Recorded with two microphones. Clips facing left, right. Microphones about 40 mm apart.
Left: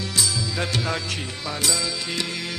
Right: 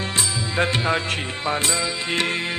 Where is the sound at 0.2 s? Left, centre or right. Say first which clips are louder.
Right 3 dB; right.